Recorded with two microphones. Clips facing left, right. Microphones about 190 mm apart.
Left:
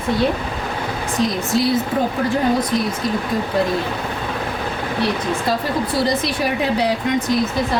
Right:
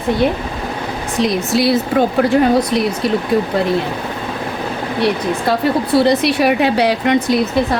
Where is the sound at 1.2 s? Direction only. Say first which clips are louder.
Right 4 dB; 75° right (ahead or behind).